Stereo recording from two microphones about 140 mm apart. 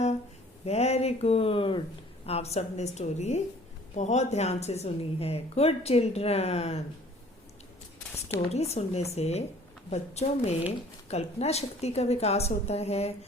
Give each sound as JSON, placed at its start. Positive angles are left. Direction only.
{"t": 0.6, "sound": "speech", "side_deg": 50}
{"t": 8.4, "sound": "speech", "side_deg": 50}